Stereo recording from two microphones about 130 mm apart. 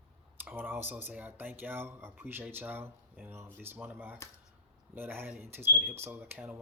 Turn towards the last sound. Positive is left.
turn(degrees=-15)  # may be behind; listen again after turning